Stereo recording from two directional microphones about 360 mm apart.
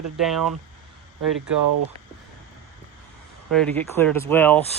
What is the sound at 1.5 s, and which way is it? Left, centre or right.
Speech, right.